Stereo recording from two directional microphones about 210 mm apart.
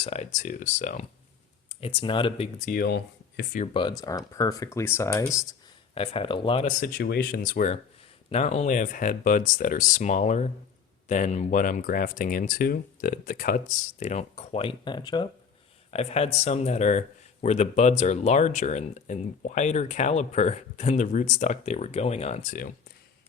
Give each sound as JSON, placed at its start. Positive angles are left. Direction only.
{"t": 0.0, "sound": "speech", "side_deg": 30}
{"t": 1.8, "sound": "speech", "side_deg": 25}
{"t": 2.6, "sound": "speech", "side_deg": 45}
{"t": 4.0, "sound": "speech", "side_deg": 15}
{"t": 5.9, "sound": "speech", "side_deg": 25}